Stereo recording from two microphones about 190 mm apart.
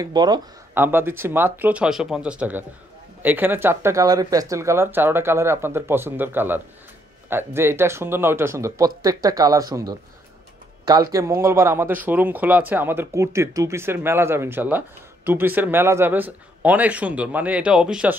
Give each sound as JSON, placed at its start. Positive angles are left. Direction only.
{"t": 0.0, "sound": "speech", "side_deg": -20}
{"t": 0.7, "sound": "speech", "side_deg": -10}